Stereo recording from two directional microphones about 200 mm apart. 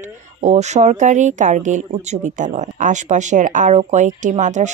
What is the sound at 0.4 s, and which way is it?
Speech, 35° right (ahead or behind).